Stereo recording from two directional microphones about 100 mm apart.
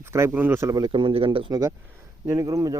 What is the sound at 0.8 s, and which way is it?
Speech, 60° right (ahead or behind).